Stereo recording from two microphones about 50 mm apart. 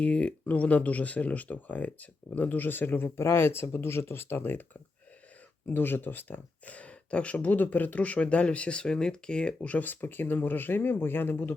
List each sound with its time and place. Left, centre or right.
0.0 s speech: left
3.2 s speech: left; by 9.7 s centre
9.7 s speech: left